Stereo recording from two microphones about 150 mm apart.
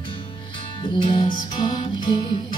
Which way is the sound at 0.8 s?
35° left (ahead or behind).